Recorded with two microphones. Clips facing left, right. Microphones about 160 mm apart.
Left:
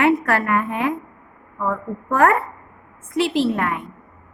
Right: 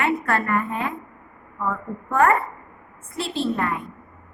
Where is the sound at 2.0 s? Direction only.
90° left.